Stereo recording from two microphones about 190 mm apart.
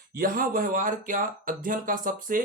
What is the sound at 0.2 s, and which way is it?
Speech, 50° right (ahead or behind).